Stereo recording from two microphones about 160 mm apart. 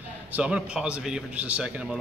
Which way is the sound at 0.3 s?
10° right (ahead or behind).